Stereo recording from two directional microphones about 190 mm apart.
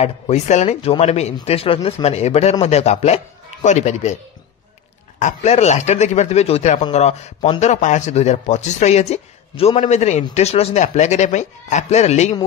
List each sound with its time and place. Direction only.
0.0 s a man's voice: 35° left (ahead or behind)
5.2 s a man's voice: 35° left (ahead or behind)